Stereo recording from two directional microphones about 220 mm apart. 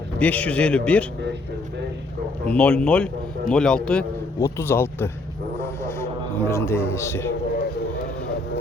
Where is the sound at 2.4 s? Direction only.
5° left (ahead or behind).